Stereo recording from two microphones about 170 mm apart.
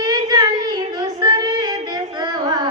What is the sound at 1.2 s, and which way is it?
Female singing, 25° right (ahead or behind).